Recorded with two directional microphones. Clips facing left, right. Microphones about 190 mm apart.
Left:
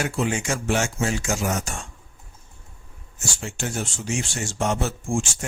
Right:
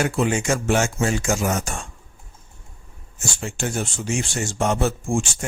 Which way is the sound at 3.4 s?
55° right (ahead or behind).